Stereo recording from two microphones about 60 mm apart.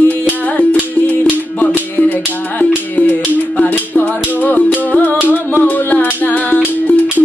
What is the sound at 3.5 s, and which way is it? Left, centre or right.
Music, left.